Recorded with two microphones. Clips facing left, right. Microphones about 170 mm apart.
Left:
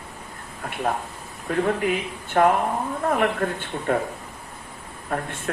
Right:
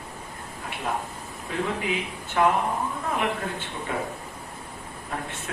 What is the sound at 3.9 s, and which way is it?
Speech, 55° left (ahead or behind).